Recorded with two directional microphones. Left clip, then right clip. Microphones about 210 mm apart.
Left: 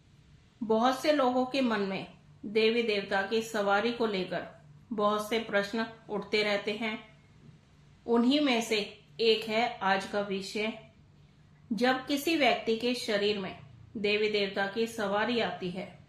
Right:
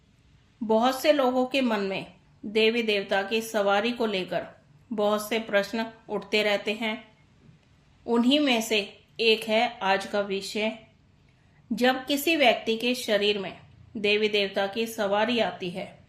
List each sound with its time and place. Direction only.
0.7 s a woman's voice: 40° right (ahead or behind)
8.0 s a woman's voice: 35° right (ahead or behind)
11.7 s a woman's voice: 40° right (ahead or behind)